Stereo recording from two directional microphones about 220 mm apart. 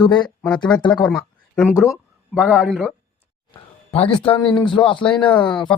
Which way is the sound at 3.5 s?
25° left (ahead or behind).